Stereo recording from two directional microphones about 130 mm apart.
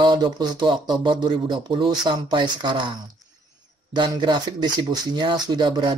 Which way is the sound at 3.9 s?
35° right (ahead or behind).